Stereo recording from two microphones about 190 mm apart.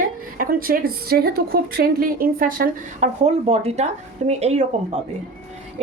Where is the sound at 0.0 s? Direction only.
50° right (ahead or behind).